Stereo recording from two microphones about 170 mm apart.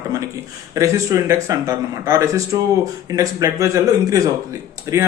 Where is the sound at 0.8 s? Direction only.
20° right (ahead or behind).